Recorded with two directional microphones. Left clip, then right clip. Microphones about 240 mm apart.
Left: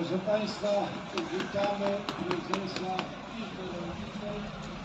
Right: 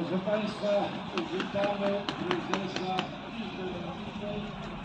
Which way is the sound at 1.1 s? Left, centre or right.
Right.